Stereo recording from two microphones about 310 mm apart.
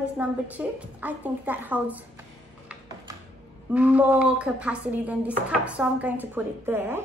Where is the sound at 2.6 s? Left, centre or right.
Centre.